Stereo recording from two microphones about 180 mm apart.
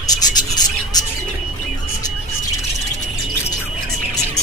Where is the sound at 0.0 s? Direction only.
20° left (ahead or behind).